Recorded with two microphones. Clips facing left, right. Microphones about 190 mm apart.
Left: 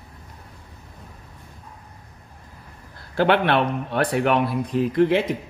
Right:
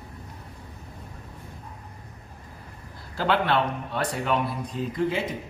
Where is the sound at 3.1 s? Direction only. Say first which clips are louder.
Left 5 dB; 65° left (ahead or behind).